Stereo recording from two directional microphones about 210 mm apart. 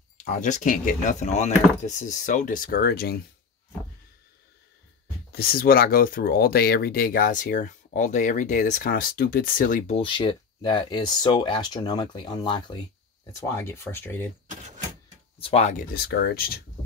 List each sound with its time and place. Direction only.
0.2 s speech: 35° left (ahead or behind)
5.3 s speech: 45° left (ahead or behind); by 14.2 s 10° left (ahead or behind)
14.5 s vehicle: 35° right (ahead or behind)
15.4 s speech: 30° left (ahead or behind)
15.9 s speech: 50° left (ahead or behind)